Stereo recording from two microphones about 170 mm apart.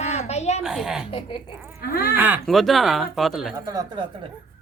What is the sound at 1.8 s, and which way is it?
Speech, 60° left (ahead or behind).